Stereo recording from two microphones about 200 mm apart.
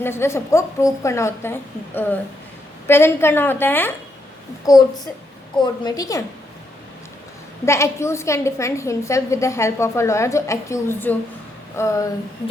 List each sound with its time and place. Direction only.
0.0 s a woman's voice: 10° left (ahead or behind)
2.8 s a woman's voice: 10° left (ahead or behind)
7.6 s a woman's voice: 15° left (ahead or behind)